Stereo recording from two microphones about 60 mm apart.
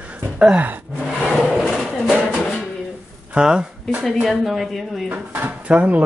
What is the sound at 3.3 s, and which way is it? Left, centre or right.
Speech, centre.